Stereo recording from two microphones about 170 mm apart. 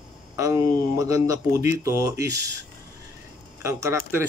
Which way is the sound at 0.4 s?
20° right (ahead or behind).